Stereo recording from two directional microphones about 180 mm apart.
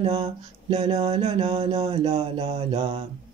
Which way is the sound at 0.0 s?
30° right (ahead or behind).